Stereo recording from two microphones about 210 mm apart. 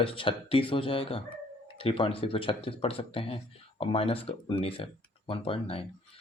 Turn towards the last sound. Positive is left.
turn(degrees=25)  # may be behind; listen again after turning